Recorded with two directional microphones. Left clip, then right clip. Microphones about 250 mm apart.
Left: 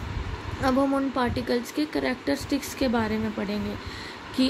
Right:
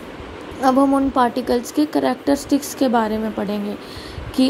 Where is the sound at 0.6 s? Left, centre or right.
Centre.